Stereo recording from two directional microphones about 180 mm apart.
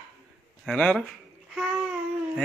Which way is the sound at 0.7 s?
5° left (ahead or behind).